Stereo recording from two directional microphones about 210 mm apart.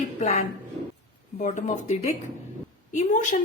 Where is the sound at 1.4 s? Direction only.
35° left (ahead or behind).